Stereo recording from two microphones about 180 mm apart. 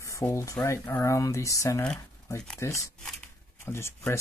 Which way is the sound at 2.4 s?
5° left (ahead or behind).